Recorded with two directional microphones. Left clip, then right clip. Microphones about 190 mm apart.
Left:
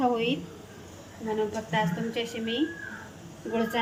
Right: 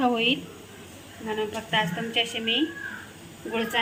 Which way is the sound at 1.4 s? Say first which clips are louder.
Right 2 dB; centre (ahead or behind).